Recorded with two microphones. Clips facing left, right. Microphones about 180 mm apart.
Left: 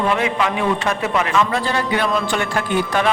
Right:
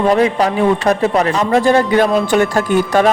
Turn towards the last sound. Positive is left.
turn(degrees=-40)  # may be behind; listen again after turning